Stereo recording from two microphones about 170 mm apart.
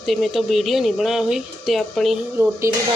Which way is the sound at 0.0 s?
Centre (ahead or behind).